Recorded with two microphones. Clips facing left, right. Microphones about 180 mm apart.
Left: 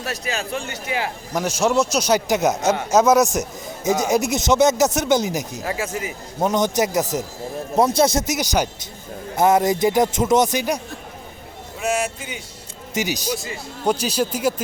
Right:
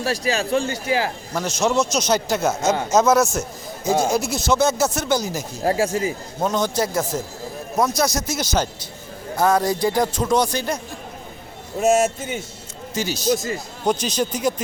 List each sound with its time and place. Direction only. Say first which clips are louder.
0.0 s a man's voice: right 5 dB; 35° right (ahead or behind)
1.3 s a man's voice: left 3 dB; 10° left (ahead or behind)
5.6 s a man's voice: right 11 dB; 35° right (ahead or behind)
6.4 s a man's voice: left 2 dB; 20° left (ahead or behind)
8.4 s a man's voice: left 1 dB; 15° left (ahead or behind)
11.8 s a man's voice: right 6 dB; 45° right (ahead or behind)
12.9 s speech: left 1 dB; 15° left (ahead or behind)
13.3 s a man's voice: right 6 dB; 40° right (ahead or behind)
13.8 s speech: left 1 dB; 10° left (ahead or behind)